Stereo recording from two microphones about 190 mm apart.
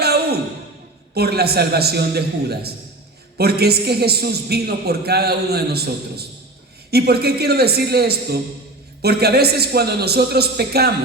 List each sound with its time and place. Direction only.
0.0 s sigh: 55° right (ahead or behind)
1.1 s a woman's voice: 55° right (ahead or behind)